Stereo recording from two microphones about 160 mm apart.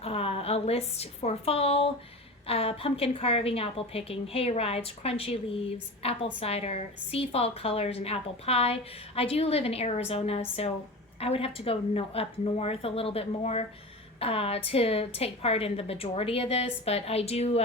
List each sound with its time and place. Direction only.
0.0 s a woman's voice: 35° left (ahead or behind)